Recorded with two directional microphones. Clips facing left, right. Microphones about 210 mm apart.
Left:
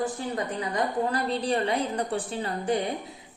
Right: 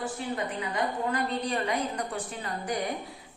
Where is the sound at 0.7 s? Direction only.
35° left (ahead or behind).